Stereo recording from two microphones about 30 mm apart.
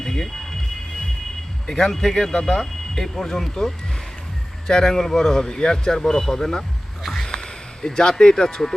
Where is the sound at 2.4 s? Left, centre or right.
Centre.